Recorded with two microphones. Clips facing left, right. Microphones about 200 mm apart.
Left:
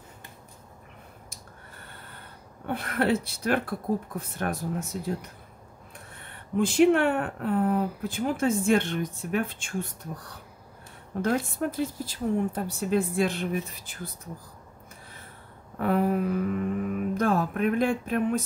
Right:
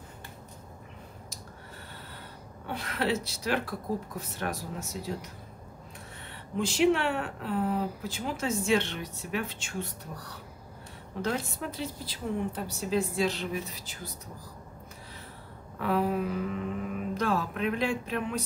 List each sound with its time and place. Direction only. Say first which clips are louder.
2.6 s speech: left 5 dB; 55° left (ahead or behind)
15.8 s mantra: left 3 dB; 50° left (ahead or behind)